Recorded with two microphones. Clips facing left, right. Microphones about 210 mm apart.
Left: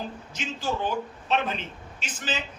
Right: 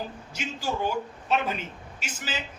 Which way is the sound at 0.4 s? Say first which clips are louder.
Even; 10° right (ahead or behind).